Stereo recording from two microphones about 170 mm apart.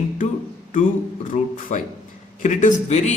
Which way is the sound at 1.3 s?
45° left (ahead or behind).